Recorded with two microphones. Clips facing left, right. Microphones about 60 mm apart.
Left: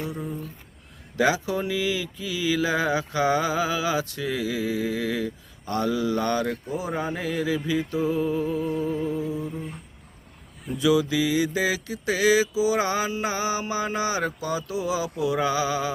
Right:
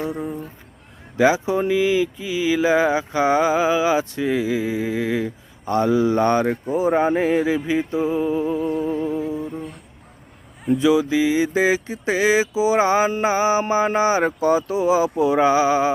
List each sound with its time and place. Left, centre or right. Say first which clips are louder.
0.0 s a sound: right 5 dB; right
1.1 s speech: right 6 dB; right
10.8 s speech: right 3 dB; right